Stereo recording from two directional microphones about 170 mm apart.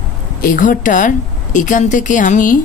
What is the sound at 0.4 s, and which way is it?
A woman's voice, 55° left (ahead or behind).